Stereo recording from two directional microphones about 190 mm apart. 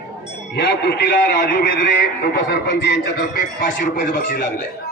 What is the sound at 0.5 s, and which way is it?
A man's voice, 60° left (ahead or behind).